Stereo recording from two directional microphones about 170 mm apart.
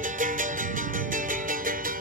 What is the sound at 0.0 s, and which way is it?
Music, 50° right (ahead or behind).